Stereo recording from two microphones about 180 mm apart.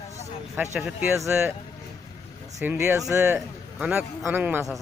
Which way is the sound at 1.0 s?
15° right (ahead or behind).